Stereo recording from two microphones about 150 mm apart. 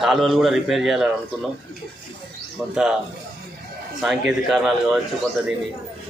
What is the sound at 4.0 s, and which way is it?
A man's voice, 5° right (ahead or behind).